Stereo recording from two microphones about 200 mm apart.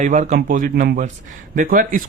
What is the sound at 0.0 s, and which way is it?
Speech, 40° right (ahead or behind).